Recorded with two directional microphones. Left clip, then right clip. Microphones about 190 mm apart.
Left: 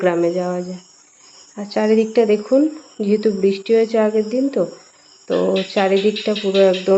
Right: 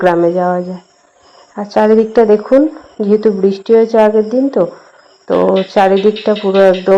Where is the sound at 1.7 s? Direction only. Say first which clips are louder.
Right 7 dB; 10° right (ahead or behind).